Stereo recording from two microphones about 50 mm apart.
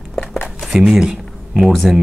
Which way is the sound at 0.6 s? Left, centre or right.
Centre.